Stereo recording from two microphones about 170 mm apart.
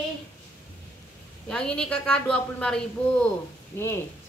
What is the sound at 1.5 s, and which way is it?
Speech, 5° left (ahead or behind).